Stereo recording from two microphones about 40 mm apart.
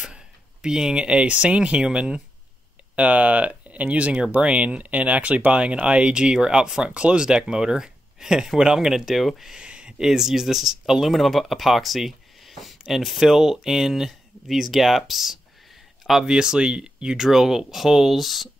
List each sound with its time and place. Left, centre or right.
0.0 s speech: centre
3.0 s speech: right; by 9.3 s centre
9.6 s speech: right; by 11.1 s centre
11.1 s speech: centre